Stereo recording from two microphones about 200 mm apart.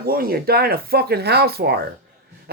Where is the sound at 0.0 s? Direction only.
50° right (ahead or behind).